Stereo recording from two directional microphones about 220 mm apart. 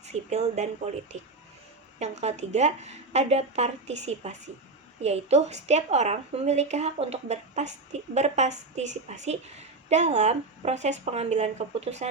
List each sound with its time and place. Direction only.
0.0 s a woman's voice: 30° right (ahead or behind)